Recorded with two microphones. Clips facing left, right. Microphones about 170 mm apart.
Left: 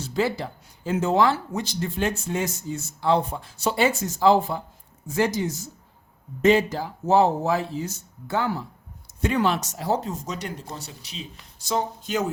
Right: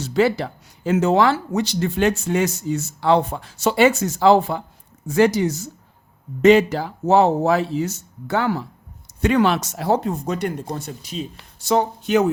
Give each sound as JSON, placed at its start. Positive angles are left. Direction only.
{"t": 0.0, "sound": "speech", "side_deg": -75}